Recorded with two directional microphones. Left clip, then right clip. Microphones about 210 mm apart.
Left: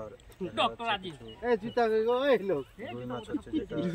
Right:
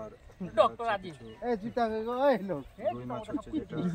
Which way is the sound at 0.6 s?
20° right (ahead or behind).